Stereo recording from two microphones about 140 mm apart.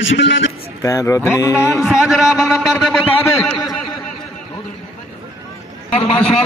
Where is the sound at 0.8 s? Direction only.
20° left (ahead or behind).